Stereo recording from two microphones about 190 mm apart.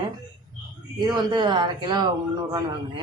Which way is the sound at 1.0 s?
25° right (ahead or behind).